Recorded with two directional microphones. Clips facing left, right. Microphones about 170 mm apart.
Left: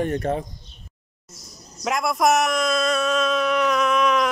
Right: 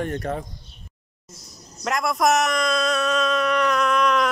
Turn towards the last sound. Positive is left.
turn(degrees=0)  # may be behind; listen again after turning